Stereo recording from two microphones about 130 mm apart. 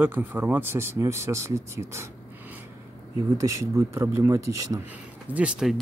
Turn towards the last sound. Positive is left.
turn(degrees=-10)  # may be behind; listen again after turning